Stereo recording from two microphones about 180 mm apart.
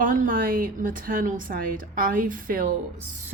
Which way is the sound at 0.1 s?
50° right (ahead or behind).